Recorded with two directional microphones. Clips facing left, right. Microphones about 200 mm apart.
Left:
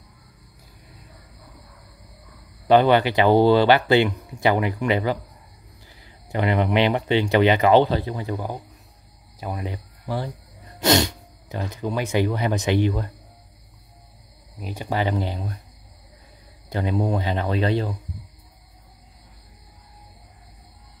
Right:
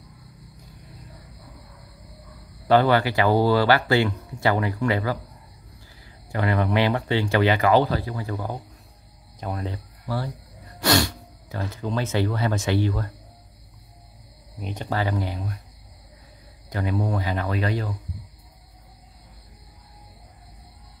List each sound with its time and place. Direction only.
2.7 s speech: 20° left (ahead or behind)
14.6 s speech: 10° left (ahead or behind); by 15.5 s 25° left (ahead or behind)
16.6 s speech: 20° left (ahead or behind)